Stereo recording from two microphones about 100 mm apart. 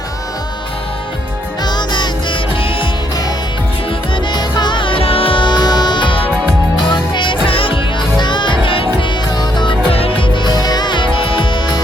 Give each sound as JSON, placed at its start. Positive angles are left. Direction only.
{"t": 1.6, "sound": "music", "side_deg": 50}
{"t": 4.1, "sound": "music", "side_deg": 45}
{"t": 8.2, "sound": "music", "side_deg": 50}
{"t": 9.4, "sound": "music", "side_deg": 50}
{"t": 9.9, "sound": "music", "side_deg": 70}